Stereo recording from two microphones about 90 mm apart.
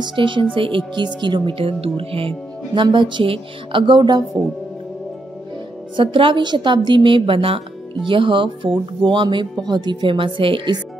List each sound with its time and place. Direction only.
0.0 s speech: 65° right (ahead or behind)
5.9 s speech: 70° right (ahead or behind); by 7.6 s 90° right
8.1 s speech: 65° right (ahead or behind)